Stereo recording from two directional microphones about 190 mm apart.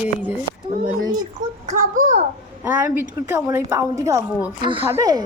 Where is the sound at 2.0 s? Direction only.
40° right (ahead or behind).